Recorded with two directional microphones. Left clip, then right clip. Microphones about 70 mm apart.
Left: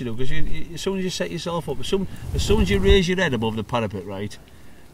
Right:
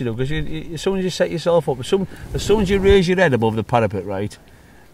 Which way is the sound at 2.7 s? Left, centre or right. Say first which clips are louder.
Right 4 dB; right.